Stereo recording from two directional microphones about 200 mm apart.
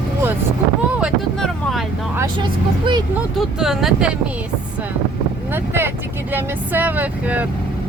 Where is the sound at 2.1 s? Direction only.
15° right (ahead or behind).